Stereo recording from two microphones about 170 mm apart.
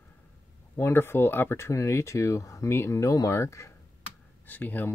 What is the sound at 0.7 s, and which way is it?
Speech, 15° left (ahead or behind).